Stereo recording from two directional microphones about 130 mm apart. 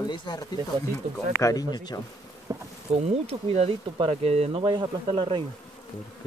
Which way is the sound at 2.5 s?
30° right (ahead or behind).